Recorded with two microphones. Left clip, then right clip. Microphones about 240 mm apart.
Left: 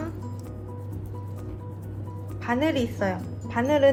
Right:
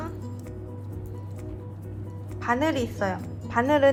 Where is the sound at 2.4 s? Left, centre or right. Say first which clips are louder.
Even; right.